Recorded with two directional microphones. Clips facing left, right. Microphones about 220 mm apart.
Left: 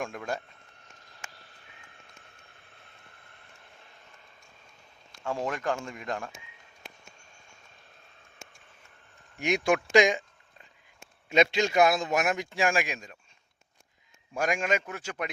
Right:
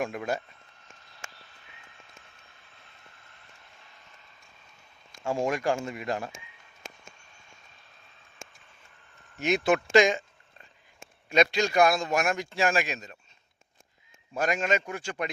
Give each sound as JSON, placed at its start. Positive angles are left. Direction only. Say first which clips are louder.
{"t": 0.0, "sound": "speech", "louder": "right 4 dB", "side_deg": -5}
{"t": 2.6, "sound": "vehicle", "louder": "left 1 dB", "side_deg": 55}
{"t": 5.2, "sound": "speech", "louder": "right 4 dB", "side_deg": -10}
{"t": 9.4, "sound": "a man's voice", "louder": "right 1 dB", "side_deg": 15}
{"t": 11.3, "sound": "a man's voice", "louder": "even", "side_deg": 25}
{"t": 14.3, "sound": "a man's voice", "louder": "right 1 dB", "side_deg": 10}